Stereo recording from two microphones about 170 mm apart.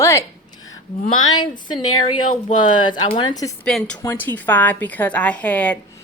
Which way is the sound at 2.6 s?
25° left (ahead or behind).